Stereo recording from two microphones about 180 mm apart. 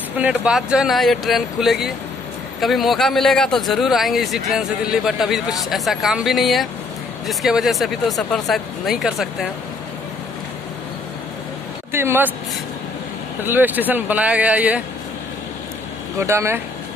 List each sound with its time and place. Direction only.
0.2 s speech: 5° right (ahead or behind)
11.9 s a man's voice: 15° right (ahead or behind)
13.4 s a man's voice: 10° right (ahead or behind)
16.2 s a man's voice: 15° right (ahead or behind)